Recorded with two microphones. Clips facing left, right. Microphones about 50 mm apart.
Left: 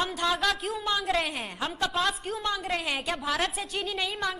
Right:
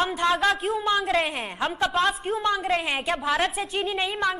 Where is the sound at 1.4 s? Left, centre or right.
Right.